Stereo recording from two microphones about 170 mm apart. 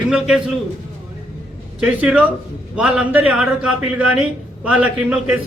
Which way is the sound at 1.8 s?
10° right (ahead or behind).